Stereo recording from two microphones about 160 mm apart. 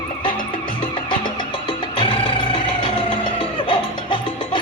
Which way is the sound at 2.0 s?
35° left (ahead or behind).